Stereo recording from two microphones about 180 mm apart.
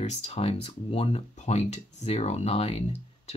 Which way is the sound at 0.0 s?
35° left (ahead or behind).